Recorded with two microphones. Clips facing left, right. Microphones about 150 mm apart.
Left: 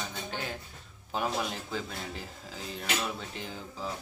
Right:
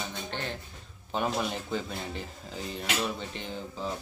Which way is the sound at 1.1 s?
Centre (ahead or behind).